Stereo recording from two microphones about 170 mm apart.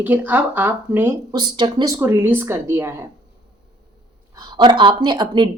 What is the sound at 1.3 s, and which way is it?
Speech, 25° right (ahead or behind).